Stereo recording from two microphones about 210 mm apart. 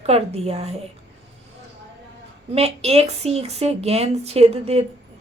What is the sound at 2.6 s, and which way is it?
A woman's voice, 30° right (ahead or behind).